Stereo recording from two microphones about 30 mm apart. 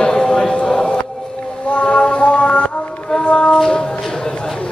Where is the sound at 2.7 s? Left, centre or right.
Left.